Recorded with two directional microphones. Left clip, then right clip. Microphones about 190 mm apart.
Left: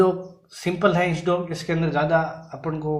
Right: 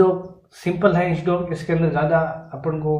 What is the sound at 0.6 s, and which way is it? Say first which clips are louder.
A man's voice: right 2 dB; 35° left (ahead or behind).